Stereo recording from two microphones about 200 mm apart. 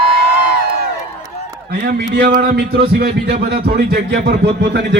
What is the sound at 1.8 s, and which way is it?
A man's voice, 50° right (ahead or behind).